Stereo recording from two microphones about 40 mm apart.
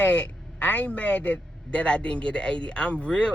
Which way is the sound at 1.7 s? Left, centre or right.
Left.